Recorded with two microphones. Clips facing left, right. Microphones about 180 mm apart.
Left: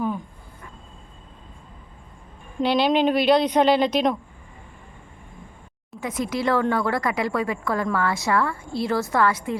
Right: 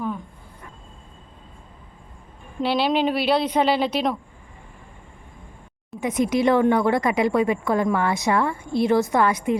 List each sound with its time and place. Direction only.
2.6 s speech: 5° right (ahead or behind)
6.0 s a woman's voice: 20° right (ahead or behind)